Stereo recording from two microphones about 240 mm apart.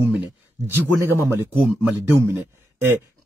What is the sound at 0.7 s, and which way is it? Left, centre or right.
A man's voice, centre.